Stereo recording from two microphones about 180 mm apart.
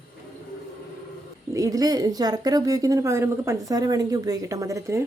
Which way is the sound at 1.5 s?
20° right (ahead or behind).